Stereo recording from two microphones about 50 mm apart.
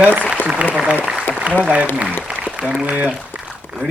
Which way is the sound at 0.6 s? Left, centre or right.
Right.